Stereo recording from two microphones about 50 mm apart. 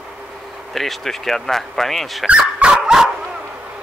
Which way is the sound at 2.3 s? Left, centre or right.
Right.